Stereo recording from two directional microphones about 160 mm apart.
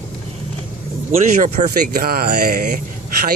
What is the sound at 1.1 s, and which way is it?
Speech, 50° right (ahead or behind).